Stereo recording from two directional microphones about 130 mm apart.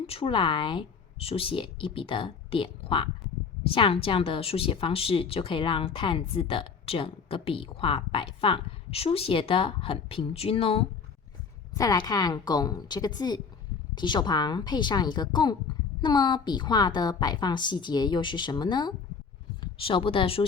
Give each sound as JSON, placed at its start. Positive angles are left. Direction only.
{"t": 0.1, "sound": "a woman's voice", "side_deg": 45}
{"t": 11.7, "sound": "a woman's voice", "side_deg": 25}